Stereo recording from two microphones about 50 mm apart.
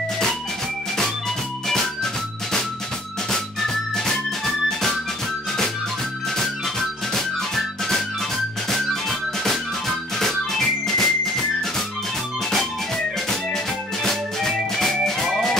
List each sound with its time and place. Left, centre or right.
3.3 s music: centre
6.3 s music: centre
10.1 s music: centre
12.4 s music: centre